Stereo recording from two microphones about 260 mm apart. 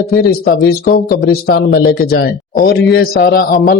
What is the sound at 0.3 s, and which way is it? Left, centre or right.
A man's voice, left.